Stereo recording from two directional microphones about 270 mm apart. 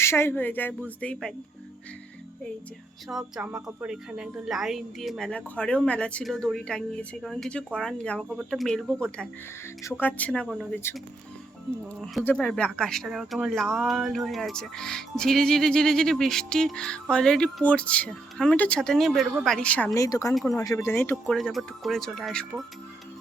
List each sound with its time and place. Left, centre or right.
0.0 s speech: centre
3.1 s speech: centre
12.0 s speech: centre
20.3 s speech: centre